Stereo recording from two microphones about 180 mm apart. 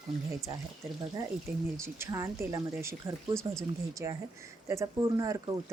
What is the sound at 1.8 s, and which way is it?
Speech, 15° right (ahead or behind).